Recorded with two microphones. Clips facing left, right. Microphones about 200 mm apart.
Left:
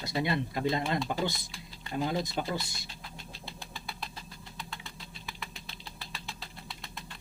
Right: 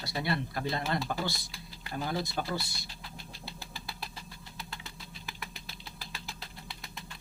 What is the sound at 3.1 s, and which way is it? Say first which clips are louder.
Engine: right 1 dB; 5° right (ahead or behind).